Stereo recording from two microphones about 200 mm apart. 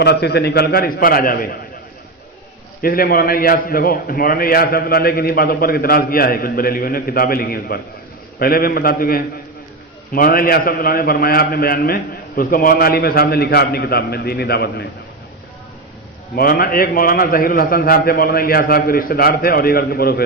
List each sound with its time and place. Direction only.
0.0 s a man's voice: 55° left (ahead or behind)
2.8 s a man's voice: 50° left (ahead or behind)
16.3 s a man's voice: 50° left (ahead or behind)